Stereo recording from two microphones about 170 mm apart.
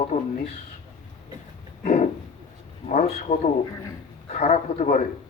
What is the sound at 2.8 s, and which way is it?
A man's voice, 45° left (ahead or behind).